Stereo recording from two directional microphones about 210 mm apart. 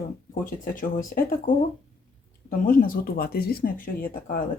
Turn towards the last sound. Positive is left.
turn(degrees=45)  # may be behind; listen again after turning